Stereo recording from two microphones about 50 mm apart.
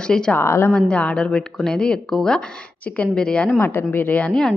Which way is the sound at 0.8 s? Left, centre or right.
Left.